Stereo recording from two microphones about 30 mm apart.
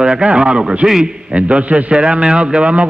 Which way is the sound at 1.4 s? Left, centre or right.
Right.